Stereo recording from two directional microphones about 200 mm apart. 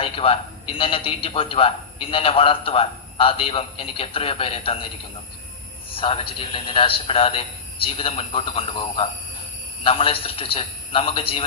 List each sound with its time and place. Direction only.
0.0 s a sound: 30° left (ahead or behind)
0.8 s a man's voice: 25° left (ahead or behind)
5.9 s a man's voice: 25° left (ahead or behind)